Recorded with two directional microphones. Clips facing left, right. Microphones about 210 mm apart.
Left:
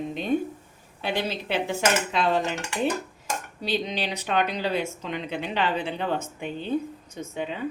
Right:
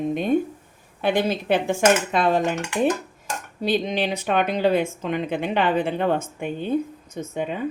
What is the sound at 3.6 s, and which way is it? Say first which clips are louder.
Speech: right 6 dB; 50° right (ahead or behind).